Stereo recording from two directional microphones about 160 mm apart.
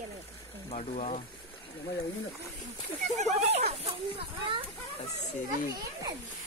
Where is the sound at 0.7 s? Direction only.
45° left (ahead or behind).